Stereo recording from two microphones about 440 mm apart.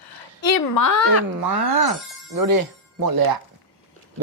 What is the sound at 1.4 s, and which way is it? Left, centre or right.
Speech, right.